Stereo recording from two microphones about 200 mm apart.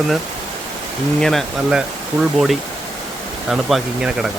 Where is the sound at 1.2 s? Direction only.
Centre (ahead or behind).